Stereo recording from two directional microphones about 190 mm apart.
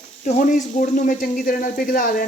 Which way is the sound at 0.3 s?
40° left (ahead or behind).